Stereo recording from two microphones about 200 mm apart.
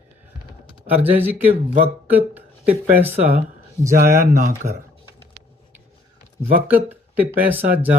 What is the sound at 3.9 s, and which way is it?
Speech, 45° right (ahead or behind).